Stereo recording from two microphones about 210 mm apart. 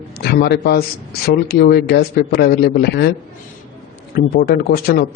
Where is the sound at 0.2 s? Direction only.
50° left (ahead or behind).